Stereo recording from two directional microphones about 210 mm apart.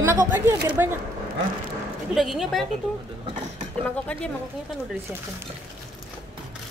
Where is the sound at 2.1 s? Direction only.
Centre (ahead or behind).